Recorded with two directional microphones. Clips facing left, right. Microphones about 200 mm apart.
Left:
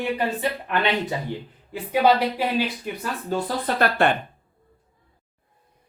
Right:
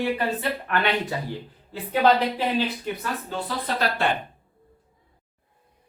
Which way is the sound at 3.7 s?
50° left (ahead or behind).